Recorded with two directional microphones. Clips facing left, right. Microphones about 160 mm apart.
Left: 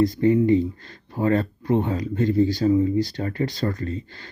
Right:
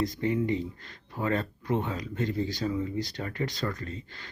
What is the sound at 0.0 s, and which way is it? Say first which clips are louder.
Speech: left 10 dB; 35° left (ahead or behind).